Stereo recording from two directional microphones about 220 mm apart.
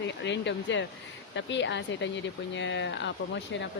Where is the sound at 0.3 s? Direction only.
55° left (ahead or behind).